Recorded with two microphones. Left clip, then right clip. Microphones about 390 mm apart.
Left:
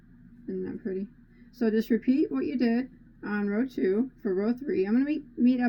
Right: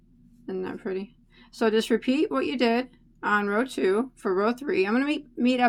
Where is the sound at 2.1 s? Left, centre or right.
Centre.